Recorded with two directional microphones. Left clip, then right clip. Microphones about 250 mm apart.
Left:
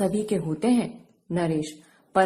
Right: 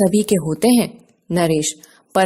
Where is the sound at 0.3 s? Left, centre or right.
Right.